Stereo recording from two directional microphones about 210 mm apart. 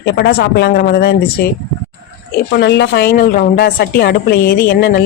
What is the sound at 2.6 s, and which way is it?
Speech, 55° left (ahead or behind).